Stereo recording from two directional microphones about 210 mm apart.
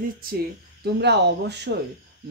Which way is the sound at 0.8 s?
55° right (ahead or behind).